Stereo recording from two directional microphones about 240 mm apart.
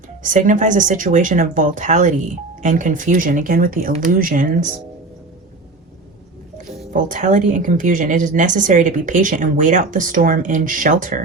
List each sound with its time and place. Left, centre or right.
0.2 s speech: right
6.9 s speech: right